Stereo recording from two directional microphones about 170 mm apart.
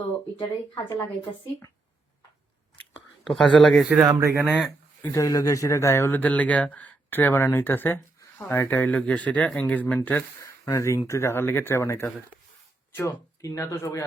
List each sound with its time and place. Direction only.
0.3 s speech: 25° left (ahead or behind)
3.2 s speech: 5° left (ahead or behind)
4.0 s speech: 20° right (ahead or behind)
5.0 s speech: 20° left (ahead or behind)